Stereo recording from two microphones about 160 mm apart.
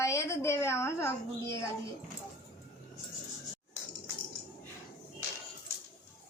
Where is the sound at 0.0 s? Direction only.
15° left (ahead or behind).